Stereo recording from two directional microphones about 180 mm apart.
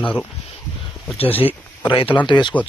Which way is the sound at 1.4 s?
30° left (ahead or behind).